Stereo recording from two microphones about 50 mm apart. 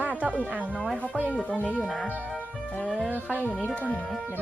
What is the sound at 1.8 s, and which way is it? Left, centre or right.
Speech, centre.